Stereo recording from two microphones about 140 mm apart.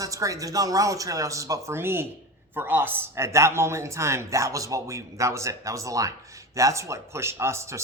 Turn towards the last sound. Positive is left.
turn(degrees=-20)  # may be behind; listen again after turning